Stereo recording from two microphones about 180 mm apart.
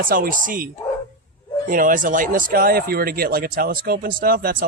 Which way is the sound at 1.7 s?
50° right (ahead or behind).